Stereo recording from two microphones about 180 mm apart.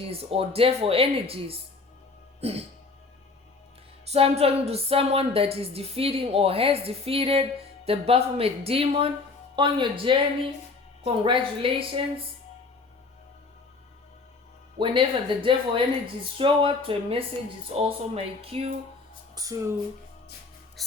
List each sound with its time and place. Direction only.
0.1 s a woman's voice: 30° right (ahead or behind)
4.1 s a woman's voice: 35° right (ahead or behind)
14.8 s a woman's voice: 30° right (ahead or behind)
19.3 s speech: 20° right (ahead or behind)
20.8 s music: centre (ahead or behind)